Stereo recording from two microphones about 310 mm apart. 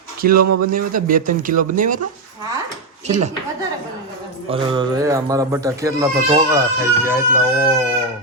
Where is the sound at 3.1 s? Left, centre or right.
Right.